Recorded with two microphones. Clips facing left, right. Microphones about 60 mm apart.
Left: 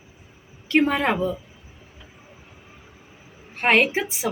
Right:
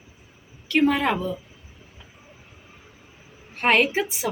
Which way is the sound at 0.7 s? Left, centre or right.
Left.